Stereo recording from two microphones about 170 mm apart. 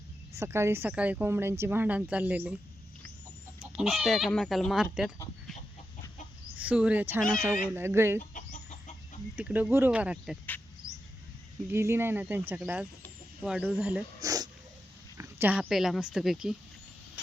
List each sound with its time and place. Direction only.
0.3 s speech: 15° right (ahead or behind)
3.6 s speech: 5° right (ahead or behind)
6.6 s speech: 5° right (ahead or behind)
9.3 s speech: 10° right (ahead or behind)
11.7 s speech: 15° right (ahead or behind)
14.2 s dog: 20° right (ahead or behind)
15.2 s speech: 10° right (ahead or behind)